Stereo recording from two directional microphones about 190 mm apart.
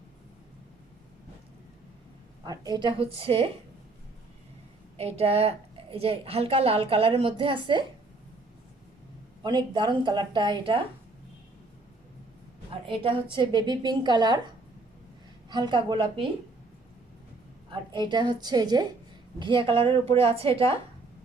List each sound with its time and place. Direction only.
2.4 s a woman's voice: 20° right (ahead or behind)
4.9 s a woman's voice: 30° right (ahead or behind)
9.4 s a woman's voice: 25° right (ahead or behind)
12.8 s a woman's voice: 30° right (ahead or behind)
15.4 s a woman's voice: 25° right (ahead or behind)
17.7 s a woman's voice: 25° right (ahead or behind)